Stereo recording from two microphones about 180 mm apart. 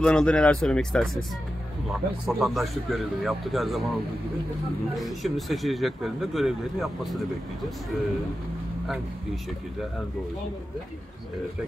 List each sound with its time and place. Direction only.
0.0 s speech: 5° left (ahead or behind)
4.9 s speech: centre (ahead or behind)
8.8 s speech: centre (ahead or behind)